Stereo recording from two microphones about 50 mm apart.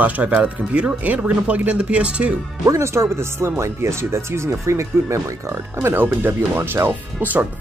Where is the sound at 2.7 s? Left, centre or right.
Right.